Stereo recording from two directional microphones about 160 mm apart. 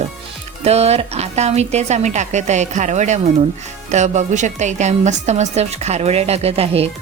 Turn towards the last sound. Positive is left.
turn(degrees=-40)  # may be behind; listen again after turning